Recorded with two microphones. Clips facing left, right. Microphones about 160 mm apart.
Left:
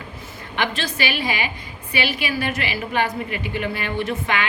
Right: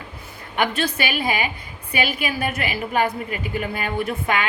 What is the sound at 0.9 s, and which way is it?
A woman's voice, 50° right (ahead or behind).